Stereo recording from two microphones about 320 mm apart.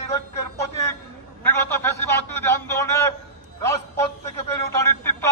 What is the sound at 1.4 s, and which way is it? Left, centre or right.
A man's voice, centre.